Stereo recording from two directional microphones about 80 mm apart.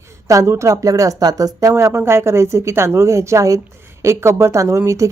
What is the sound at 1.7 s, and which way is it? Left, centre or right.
Speech, right.